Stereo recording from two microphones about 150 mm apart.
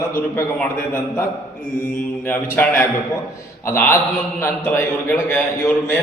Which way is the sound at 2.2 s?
15° left (ahead or behind).